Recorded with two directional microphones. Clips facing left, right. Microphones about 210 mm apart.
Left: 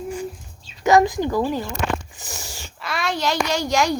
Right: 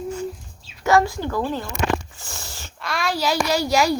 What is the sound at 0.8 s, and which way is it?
Speech, 20° left (ahead or behind).